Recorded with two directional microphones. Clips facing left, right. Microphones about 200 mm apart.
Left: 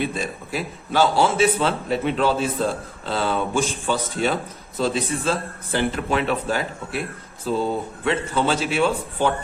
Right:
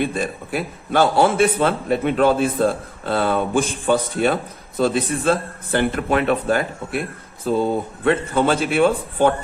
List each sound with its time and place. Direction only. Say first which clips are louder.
0.0 s a man's voice: right 3 dB; 55° right (ahead or behind)